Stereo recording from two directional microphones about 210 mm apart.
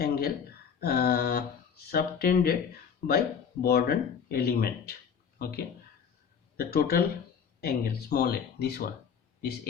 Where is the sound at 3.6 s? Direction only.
45° left (ahead or behind).